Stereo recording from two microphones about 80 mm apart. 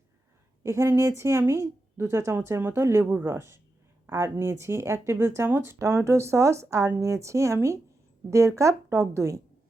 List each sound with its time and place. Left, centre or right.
0.6 s speech: right